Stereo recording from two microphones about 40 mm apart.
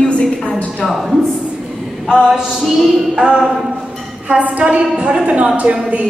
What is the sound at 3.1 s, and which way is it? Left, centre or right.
Speech, right.